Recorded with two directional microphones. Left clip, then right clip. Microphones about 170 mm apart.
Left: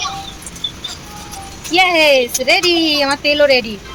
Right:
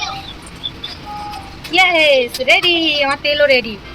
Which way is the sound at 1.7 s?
25° left (ahead or behind).